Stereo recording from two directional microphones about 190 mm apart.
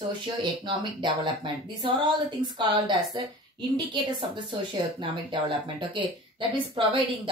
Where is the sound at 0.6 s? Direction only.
25° right (ahead or behind).